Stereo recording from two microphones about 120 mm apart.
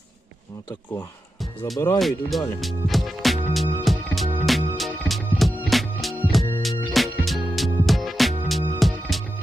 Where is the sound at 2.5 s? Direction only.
Centre (ahead or behind).